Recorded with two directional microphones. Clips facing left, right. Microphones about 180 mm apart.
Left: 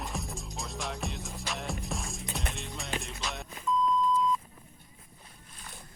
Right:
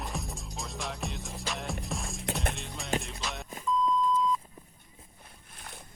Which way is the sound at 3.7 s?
Centre (ahead or behind).